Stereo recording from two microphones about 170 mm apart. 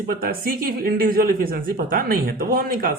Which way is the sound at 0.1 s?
60° right (ahead or behind).